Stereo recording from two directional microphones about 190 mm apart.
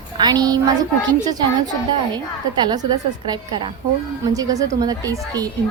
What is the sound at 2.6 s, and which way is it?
A woman's voice, 20° right (ahead or behind).